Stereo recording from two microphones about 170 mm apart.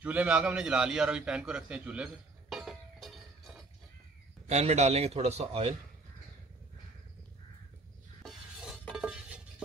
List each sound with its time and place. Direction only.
0.0 s a man's voice: 10° right (ahead or behind)
2.5 s a sound: centre (ahead or behind)
4.5 s a man's voice: 40° right (ahead or behind)
8.2 s stir: centre (ahead or behind)